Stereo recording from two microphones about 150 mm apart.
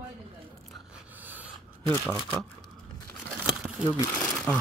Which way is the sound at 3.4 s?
5° right (ahead or behind).